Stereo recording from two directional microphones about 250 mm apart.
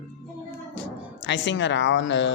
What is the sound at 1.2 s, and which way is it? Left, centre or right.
Speech, left.